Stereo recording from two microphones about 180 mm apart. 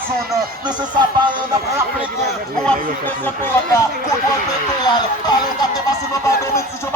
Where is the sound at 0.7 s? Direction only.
25° right (ahead or behind).